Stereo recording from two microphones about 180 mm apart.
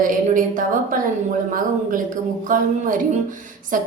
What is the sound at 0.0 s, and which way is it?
Speech, 45° right (ahead or behind).